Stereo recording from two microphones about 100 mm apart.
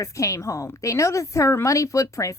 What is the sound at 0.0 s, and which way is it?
A woman's voice, 30° left (ahead or behind).